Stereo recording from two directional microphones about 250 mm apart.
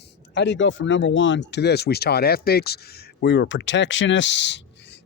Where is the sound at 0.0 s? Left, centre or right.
Left.